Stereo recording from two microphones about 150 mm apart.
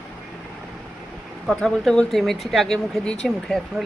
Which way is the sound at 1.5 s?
5° left (ahead or behind).